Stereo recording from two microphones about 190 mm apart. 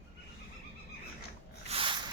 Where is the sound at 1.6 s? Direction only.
30° right (ahead or behind).